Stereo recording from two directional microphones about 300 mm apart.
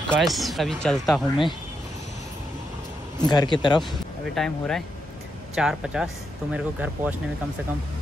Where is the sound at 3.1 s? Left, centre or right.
Centre.